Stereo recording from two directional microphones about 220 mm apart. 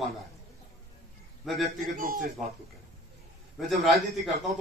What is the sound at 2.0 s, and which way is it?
Speech, 40° right (ahead or behind).